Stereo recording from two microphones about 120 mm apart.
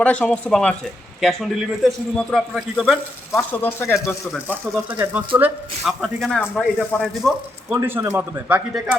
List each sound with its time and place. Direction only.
0.0 s a man's voice: 10° left (ahead or behind)
3.3 s speech: 20° left (ahead or behind)
4.4 s speech: 15° right (ahead or behind)
5.8 s a man's voice: centre (ahead or behind)
7.7 s speech: 20° right (ahead or behind)
8.4 s speech: 10° right (ahead or behind)